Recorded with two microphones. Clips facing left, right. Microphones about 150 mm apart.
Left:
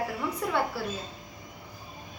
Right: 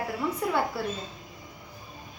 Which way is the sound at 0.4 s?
Centre (ahead or behind).